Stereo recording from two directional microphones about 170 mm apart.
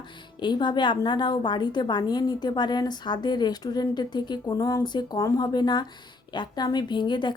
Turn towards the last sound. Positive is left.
turn(degrees=25)  # may be behind; listen again after turning